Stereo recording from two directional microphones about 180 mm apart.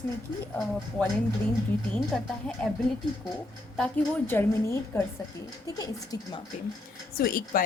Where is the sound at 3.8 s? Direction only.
5° left (ahead or behind).